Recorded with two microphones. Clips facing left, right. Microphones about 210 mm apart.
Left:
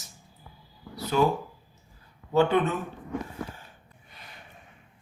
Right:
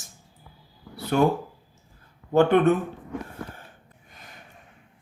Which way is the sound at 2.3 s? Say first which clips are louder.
Right 5 dB; 55° right (ahead or behind).